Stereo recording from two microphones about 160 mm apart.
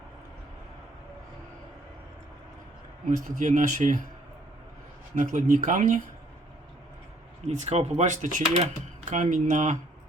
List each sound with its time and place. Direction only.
3.2 s speech: 50° right (ahead or behind)
5.1 s speech: 50° right (ahead or behind)
7.4 s speech: 40° right (ahead or behind)